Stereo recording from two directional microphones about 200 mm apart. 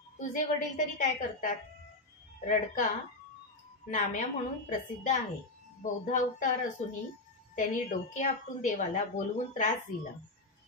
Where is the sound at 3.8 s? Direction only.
40° left (ahead or behind).